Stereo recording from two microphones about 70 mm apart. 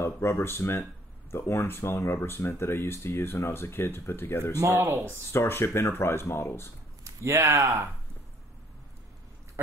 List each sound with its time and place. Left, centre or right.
0.0 s speech: left
4.7 s speech: right
5.3 s speech: left
7.1 s speech: right